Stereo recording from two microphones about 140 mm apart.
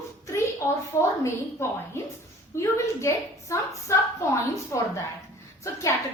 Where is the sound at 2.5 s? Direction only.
20° left (ahead or behind).